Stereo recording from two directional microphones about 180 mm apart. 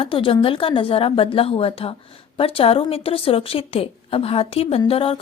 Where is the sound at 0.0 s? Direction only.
30° left (ahead or behind).